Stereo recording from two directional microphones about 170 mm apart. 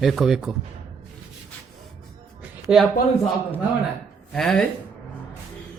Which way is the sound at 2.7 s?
5° right (ahead or behind).